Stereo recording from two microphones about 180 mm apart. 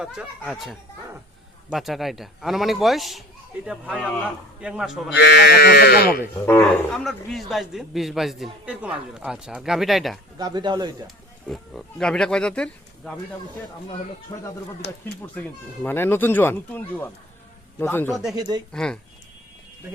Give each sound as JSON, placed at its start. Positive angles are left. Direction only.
{"t": 0.0, "sound": "a man's voice", "side_deg": -5}
{"t": 5.1, "sound": "speech", "side_deg": 65}
{"t": 6.4, "sound": "a man's voice", "side_deg": 15}
{"t": 10.3, "sound": "speech", "side_deg": -25}
{"t": 11.4, "sound": "speech", "side_deg": 0}
{"t": 15.4, "sound": "speech", "side_deg": 10}
{"t": 18.1, "sound": "a man's voice", "side_deg": 0}
{"t": 18.3, "sound": "speech", "side_deg": -20}
{"t": 18.7, "sound": "a man's voice", "side_deg": 5}